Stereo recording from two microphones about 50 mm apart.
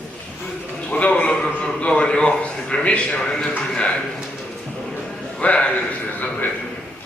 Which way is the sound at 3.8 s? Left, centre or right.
Left.